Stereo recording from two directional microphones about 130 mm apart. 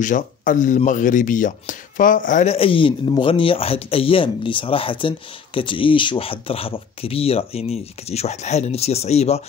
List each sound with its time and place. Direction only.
0.0 s speech: 85° left
2.4 s speech: 45° left (ahead or behind)